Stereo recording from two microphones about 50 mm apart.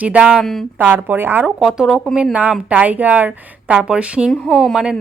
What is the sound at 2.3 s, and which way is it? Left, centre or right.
A woman's voice, right.